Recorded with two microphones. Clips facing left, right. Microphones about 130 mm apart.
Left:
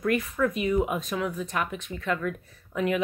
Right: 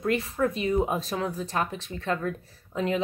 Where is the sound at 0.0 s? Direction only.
30° right (ahead or behind).